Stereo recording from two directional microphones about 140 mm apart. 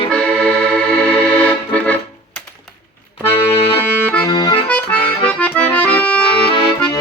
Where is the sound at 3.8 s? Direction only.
15° left (ahead or behind).